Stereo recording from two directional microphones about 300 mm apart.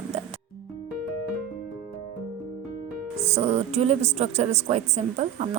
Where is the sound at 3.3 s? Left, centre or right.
Right.